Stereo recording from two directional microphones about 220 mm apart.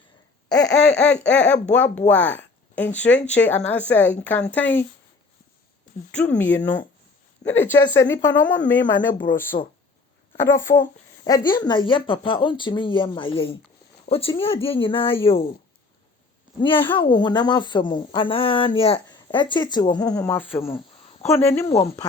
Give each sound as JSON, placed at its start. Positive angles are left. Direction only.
{"t": 0.4, "sound": "laughter", "side_deg": 5}
{"t": 1.6, "sound": "speech", "side_deg": 5}
{"t": 6.3, "sound": "speech", "side_deg": 5}
{"t": 9.5, "sound": "speech", "side_deg": 30}
{"t": 10.3, "sound": "a woman's voice", "side_deg": 10}
{"t": 16.6, "sound": "a woman's voice", "side_deg": 20}